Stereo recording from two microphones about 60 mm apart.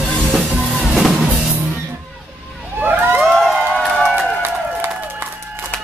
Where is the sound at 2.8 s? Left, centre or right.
Right.